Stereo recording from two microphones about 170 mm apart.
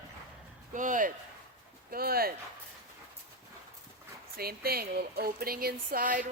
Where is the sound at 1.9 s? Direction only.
60° right (ahead or behind).